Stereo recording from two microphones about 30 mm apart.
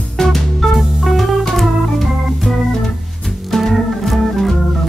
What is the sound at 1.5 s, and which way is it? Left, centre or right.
Organ, centre.